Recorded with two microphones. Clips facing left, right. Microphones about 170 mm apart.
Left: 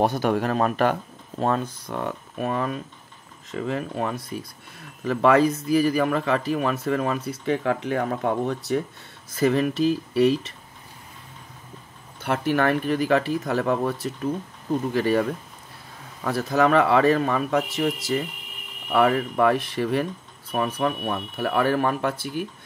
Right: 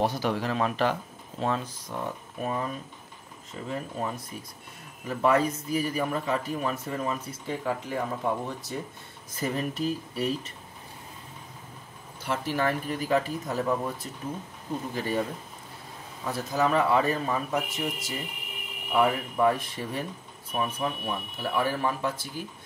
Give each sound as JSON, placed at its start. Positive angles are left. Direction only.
{"t": 0.0, "sound": "a man's voice", "side_deg": 55}
{"t": 12.2, "sound": "speech", "side_deg": 60}
{"t": 16.3, "sound": "speech", "side_deg": 70}